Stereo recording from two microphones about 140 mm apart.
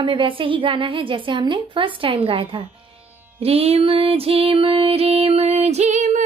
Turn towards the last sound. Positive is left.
turn(degrees=-60)  # may be behind; listen again after turning